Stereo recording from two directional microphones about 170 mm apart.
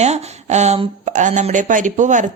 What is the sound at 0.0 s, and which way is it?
A woman's voice, 40° right (ahead or behind).